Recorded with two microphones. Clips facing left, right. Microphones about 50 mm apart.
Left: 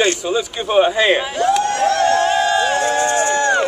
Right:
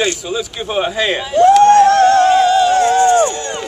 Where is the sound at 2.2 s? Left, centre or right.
Left.